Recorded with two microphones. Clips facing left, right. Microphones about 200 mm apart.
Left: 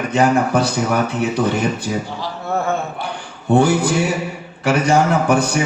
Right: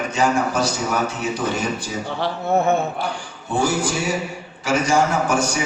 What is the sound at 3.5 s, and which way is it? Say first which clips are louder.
A man's voice: left 7 dB; 60° left (ahead or behind).